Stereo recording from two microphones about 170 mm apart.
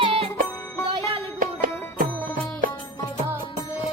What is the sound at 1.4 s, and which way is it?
Music, 50° right (ahead or behind).